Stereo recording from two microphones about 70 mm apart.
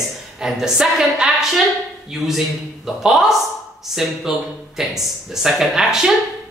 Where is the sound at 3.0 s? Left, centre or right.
Centre.